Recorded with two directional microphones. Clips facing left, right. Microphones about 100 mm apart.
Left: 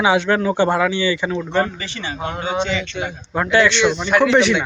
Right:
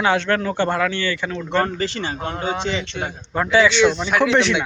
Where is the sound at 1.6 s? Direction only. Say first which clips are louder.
Right 2 dB; 40° right (ahead or behind).